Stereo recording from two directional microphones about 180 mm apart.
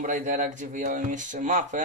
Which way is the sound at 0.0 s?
45° right (ahead or behind).